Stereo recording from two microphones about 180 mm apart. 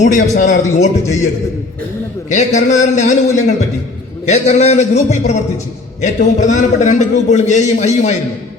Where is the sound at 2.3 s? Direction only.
40° left (ahead or behind).